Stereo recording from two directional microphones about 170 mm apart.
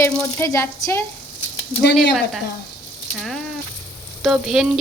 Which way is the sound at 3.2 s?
Centre (ahead or behind).